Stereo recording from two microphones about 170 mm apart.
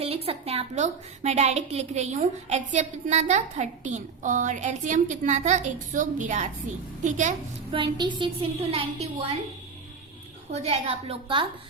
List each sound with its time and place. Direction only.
0.0 s a woman's voice: 35° right (ahead or behind)
7.7 s a woman's voice: 30° right (ahead or behind)
10.5 s a woman's voice: 35° right (ahead or behind)